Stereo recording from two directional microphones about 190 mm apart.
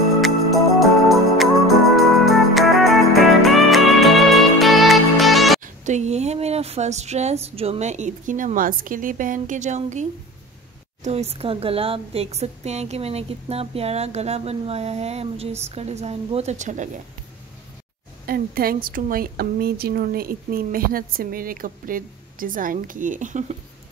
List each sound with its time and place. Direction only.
0.2 s music: centre (ahead or behind)
5.6 s speech: 40° right (ahead or behind)
11.1 s a woman's voice: 35° right (ahead or behind)
18.2 s a woman's voice: 50° right (ahead or behind)